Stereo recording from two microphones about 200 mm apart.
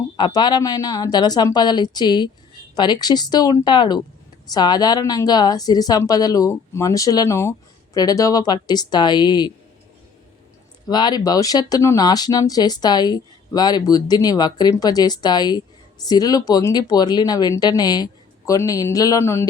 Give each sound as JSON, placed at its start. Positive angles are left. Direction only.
{"t": 0.2, "sound": "speech", "side_deg": 20}
{"t": 10.8, "sound": "speech", "side_deg": 20}